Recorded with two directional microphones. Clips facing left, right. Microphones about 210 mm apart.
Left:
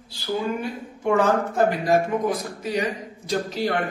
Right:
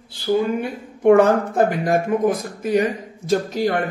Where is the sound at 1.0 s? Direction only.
55° right (ahead or behind).